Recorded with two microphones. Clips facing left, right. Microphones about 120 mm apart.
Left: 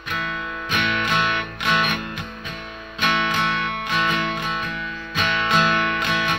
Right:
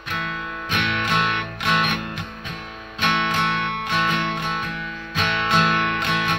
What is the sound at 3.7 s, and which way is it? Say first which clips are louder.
Music: even; centre (ahead or behind).